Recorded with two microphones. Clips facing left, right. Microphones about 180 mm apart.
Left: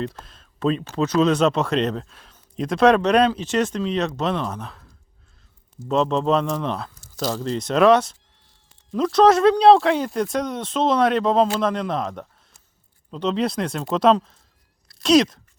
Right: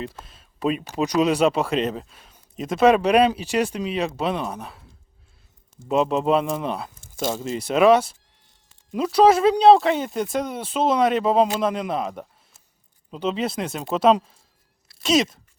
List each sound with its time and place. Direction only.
0.0 s speech: 5° right (ahead or behind)
5.9 s speech: 10° right (ahead or behind)
7.2 s speech: 25° right (ahead or behind)
7.4 s speech: 10° right (ahead or behind)
14.8 s a sound: 5° right (ahead or behind)